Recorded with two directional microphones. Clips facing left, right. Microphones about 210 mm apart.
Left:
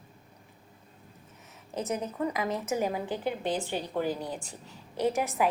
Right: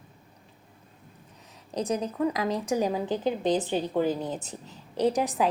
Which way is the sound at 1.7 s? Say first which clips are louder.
Right 4 dB; 15° right (ahead or behind).